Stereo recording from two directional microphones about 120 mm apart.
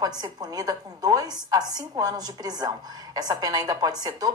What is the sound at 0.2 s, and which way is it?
A woman's voice, 35° right (ahead or behind).